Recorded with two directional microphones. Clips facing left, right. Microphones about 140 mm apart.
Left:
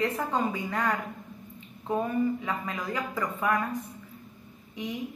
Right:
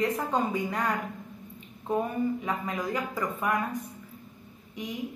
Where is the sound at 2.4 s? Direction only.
15° right (ahead or behind).